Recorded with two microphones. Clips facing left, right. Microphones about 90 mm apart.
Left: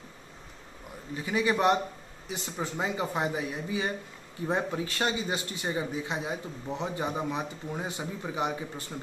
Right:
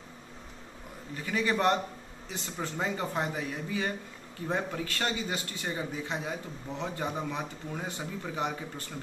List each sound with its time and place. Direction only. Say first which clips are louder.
1.1 s a man's voice: left 2 dB; 15° left (ahead or behind)